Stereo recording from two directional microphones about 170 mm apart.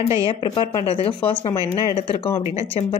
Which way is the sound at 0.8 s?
35° left (ahead or behind).